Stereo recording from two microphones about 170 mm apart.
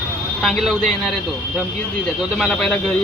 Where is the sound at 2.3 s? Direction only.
5° left (ahead or behind).